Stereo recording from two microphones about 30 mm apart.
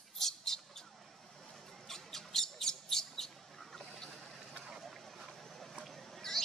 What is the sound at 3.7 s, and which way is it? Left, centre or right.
Boat, centre.